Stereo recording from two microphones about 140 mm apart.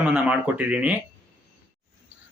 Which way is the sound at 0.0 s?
10° right (ahead or behind).